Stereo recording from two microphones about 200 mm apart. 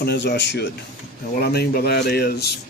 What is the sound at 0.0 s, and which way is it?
Speech, 55° left (ahead or behind).